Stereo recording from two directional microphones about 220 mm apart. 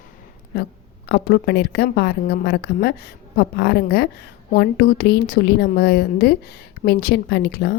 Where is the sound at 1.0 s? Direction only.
50° left (ahead or behind).